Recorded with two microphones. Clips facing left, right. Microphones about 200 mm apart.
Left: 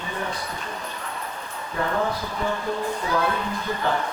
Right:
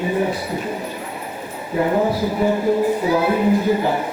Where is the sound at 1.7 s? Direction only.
15° right (ahead or behind).